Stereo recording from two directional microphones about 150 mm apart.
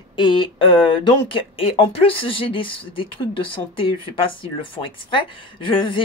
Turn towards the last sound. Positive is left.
turn(degrees=35)  # may be behind; listen again after turning